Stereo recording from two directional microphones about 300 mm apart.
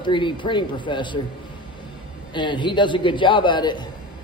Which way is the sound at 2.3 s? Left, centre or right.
Centre.